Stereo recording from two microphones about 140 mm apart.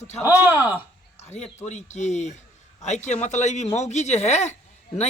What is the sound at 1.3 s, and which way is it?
A man's voice, 55° left (ahead or behind).